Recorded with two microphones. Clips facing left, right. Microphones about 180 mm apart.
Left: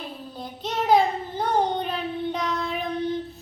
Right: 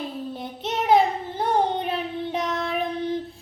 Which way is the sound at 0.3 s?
25° right (ahead or behind).